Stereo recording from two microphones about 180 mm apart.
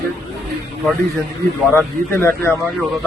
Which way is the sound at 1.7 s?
10° left (ahead or behind).